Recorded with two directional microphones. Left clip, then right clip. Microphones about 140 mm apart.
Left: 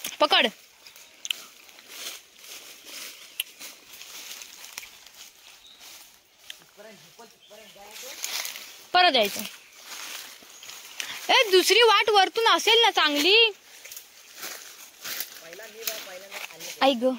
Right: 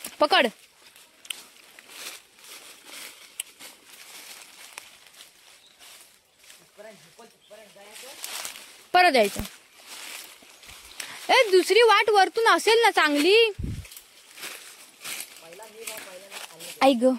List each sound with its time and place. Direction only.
0.2 s speech: 30° right (ahead or behind)
3.4 s a sound: 15° right (ahead or behind)
8.9 s speech: 50° right (ahead or behind)
11.0 s a sound: 35° right (ahead or behind)
11.4 s speech: 25° right (ahead or behind); by 13.1 s 55° right (ahead or behind)
13.3 s speech: 70° right (ahead or behind)
16.7 s speech: 50° right (ahead or behind)